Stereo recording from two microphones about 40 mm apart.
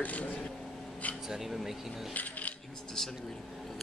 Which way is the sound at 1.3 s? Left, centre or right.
Centre.